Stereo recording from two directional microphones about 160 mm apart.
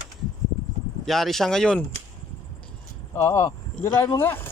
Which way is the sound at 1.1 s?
Centre (ahead or behind).